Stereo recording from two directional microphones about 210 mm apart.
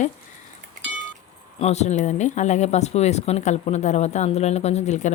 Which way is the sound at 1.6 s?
30° left (ahead or behind).